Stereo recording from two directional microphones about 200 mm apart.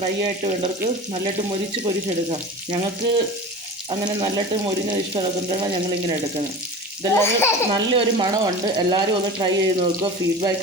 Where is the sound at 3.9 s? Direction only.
20° right (ahead or behind).